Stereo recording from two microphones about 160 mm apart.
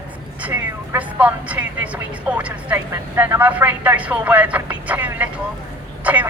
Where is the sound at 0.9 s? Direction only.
10° right (ahead or behind).